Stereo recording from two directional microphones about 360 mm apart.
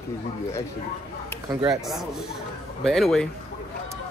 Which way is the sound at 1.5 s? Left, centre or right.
Centre.